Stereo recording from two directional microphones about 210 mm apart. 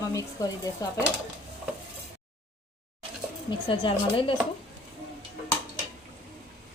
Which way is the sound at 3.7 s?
25° left (ahead or behind).